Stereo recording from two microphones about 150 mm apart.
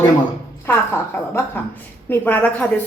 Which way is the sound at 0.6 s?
15° left (ahead or behind).